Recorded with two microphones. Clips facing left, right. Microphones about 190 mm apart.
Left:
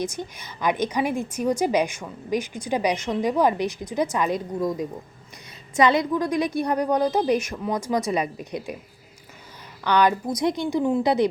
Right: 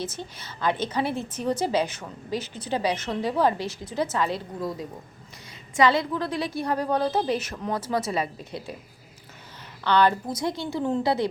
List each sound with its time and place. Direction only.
0.0 s a woman's voice: 15° left (ahead or behind)
9.8 s a woman's voice: 15° left (ahead or behind)